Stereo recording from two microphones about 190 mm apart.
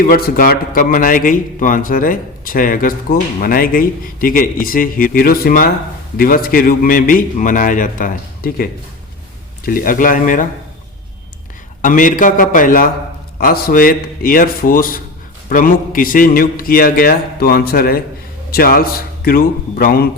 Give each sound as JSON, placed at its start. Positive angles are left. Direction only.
{"t": 0.1, "sound": "a man's voice", "side_deg": 50}
{"t": 11.8, "sound": "a man's voice", "side_deg": 45}